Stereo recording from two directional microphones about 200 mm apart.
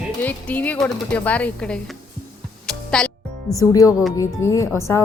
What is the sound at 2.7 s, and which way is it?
Music, 5° left (ahead or behind).